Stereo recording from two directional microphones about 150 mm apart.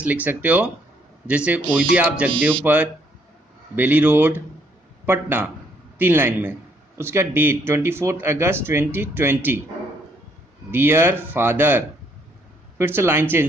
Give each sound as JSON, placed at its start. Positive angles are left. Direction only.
{"t": 0.0, "sound": "speech", "side_deg": -10}
{"t": 10.7, "sound": "speech", "side_deg": -15}